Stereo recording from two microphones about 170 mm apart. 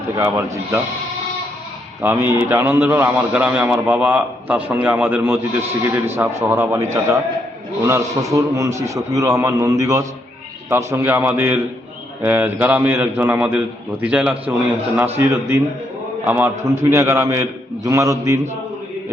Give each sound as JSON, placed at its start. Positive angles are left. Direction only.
{"t": 0.2, "sound": "a man's voice", "side_deg": -15}
{"t": 2.0, "sound": "a man's voice", "side_deg": -15}